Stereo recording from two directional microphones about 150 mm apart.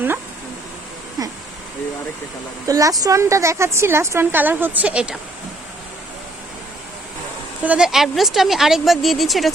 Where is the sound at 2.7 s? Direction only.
20° right (ahead or behind).